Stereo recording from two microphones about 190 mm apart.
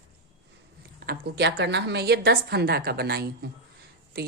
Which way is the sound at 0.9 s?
55° right (ahead or behind).